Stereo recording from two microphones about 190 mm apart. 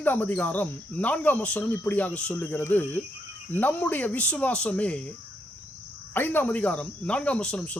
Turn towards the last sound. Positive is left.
turn(degrees=5)  # may be behind; listen again after turning